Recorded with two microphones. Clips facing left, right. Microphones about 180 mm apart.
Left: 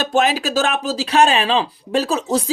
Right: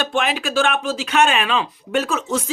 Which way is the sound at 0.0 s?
40° left (ahead or behind).